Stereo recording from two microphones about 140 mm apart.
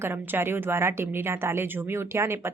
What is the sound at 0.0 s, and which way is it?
A woman's voice, 15° right (ahead or behind).